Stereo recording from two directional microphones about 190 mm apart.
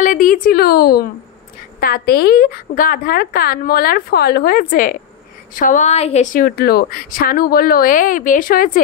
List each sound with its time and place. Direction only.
0.0 s a woman's voice: 45° left (ahead or behind)
6.4 s a woman's voice: 55° left (ahead or behind)